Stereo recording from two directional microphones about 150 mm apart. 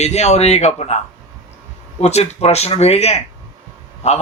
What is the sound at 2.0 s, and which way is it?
Speech, 45° left (ahead or behind).